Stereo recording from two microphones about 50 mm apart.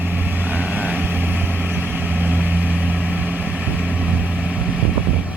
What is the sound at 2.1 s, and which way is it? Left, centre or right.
Vehicle, right.